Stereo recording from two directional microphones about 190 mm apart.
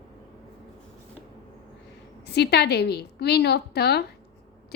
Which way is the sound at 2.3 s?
60° left (ahead or behind).